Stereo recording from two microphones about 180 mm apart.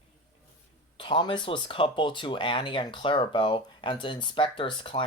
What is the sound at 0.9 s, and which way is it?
Speech, 25° left (ahead or behind).